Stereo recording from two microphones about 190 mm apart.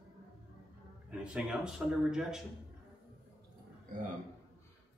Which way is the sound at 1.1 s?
5° right (ahead or behind).